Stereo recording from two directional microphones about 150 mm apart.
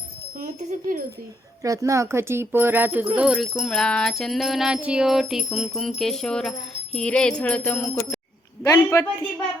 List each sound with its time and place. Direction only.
0.4 s speech: 60° right (ahead or behind)
1.6 s speech: 20° right (ahead or behind)
3.2 s jingle bell: centre (ahead or behind)
8.6 s a man's voice: 20° left (ahead or behind)